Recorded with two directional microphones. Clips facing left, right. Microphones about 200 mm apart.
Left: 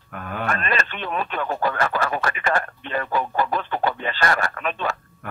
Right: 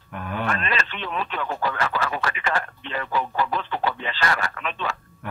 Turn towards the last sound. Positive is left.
turn(degrees=50)  # may be behind; listen again after turning